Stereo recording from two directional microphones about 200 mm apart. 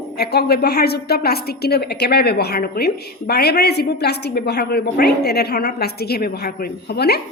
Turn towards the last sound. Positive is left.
turn(degrees=55)  # may be behind; listen again after turning